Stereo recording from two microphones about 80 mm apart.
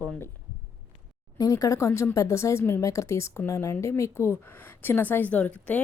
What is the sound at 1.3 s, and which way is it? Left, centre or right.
Speech, left.